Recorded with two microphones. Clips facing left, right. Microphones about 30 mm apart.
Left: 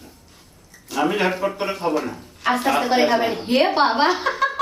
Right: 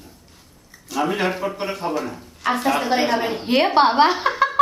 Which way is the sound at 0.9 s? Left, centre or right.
Centre.